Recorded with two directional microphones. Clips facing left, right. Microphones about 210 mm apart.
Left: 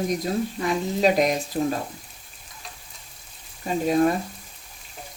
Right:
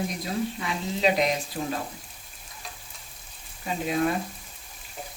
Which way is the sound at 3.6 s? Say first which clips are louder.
Left 6 dB; 40° left (ahead or behind).